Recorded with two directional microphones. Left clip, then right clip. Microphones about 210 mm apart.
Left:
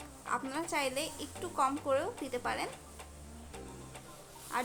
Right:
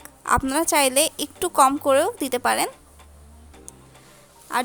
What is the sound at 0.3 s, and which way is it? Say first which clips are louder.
A woman's voice: right 15 dB; 50° right (ahead or behind).